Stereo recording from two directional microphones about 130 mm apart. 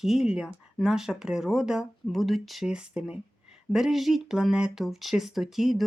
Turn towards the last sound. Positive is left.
turn(degrees=0)  # may be behind; listen again after turning